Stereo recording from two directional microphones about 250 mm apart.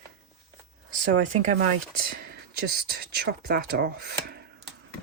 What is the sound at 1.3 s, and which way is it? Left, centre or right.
Speech, right.